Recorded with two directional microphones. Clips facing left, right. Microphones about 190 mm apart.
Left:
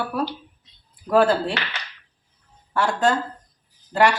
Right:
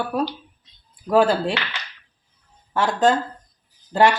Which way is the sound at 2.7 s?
20° right (ahead or behind).